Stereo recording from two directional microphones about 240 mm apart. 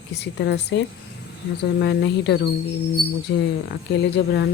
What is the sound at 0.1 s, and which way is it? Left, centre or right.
Speech, left.